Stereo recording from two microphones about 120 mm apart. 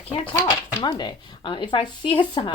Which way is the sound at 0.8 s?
35° left (ahead or behind).